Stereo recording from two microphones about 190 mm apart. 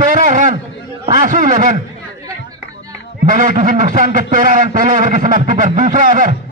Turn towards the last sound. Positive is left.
turn(degrees=-45)  # may be behind; listen again after turning